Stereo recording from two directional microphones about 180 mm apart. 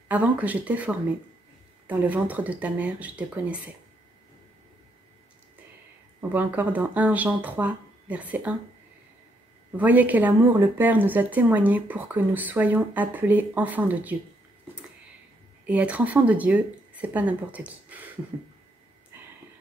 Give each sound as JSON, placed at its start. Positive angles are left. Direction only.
{"t": 0.1, "sound": "speech", "side_deg": -10}
{"t": 6.3, "sound": "speech", "side_deg": -10}
{"t": 9.7, "sound": "speech", "side_deg": -10}
{"t": 15.6, "sound": "speech", "side_deg": -10}